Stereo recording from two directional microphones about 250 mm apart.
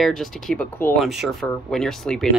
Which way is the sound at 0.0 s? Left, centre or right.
Centre.